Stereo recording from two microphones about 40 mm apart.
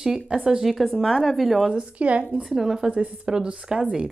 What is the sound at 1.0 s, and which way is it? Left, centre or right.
Speech, centre.